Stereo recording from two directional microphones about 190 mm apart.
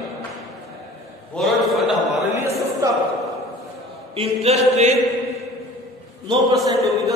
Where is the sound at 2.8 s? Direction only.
15° right (ahead or behind).